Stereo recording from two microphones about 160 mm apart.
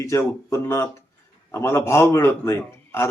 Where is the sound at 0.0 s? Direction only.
20° left (ahead or behind).